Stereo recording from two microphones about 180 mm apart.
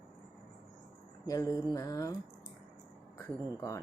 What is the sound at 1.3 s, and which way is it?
Speech, 20° left (ahead or behind).